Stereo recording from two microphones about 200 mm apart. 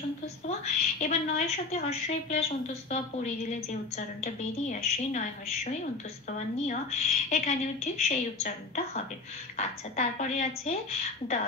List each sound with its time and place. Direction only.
0.5 s a woman's voice: 35° left (ahead or behind)